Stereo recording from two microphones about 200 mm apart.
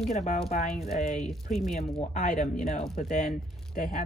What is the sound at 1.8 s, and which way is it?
Speech, 35° left (ahead or behind).